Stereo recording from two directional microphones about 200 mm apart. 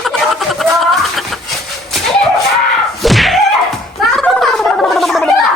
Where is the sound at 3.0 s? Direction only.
Centre (ahead or behind).